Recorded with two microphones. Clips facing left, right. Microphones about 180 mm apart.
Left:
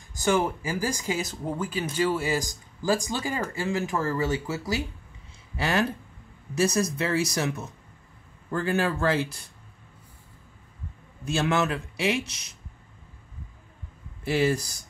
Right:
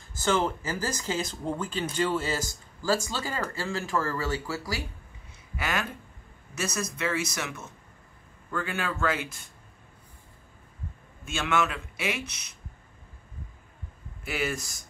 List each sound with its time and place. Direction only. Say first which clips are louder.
0.1 s speech: left 2 dB; 15° left (ahead or behind); by 9.4 s 35° left (ahead or behind)
11.2 s speech: left 3 dB; 35° left (ahead or behind)
14.2 s speech: left 7 dB; 30° left (ahead or behind)